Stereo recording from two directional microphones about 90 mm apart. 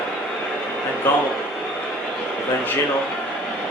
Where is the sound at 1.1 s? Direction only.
25° left (ahead or behind).